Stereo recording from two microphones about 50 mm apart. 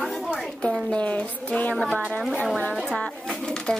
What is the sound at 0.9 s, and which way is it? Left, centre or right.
Music, left.